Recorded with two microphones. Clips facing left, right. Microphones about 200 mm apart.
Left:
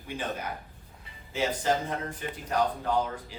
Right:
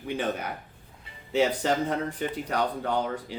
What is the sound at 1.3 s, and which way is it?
Speech, 65° right (ahead or behind).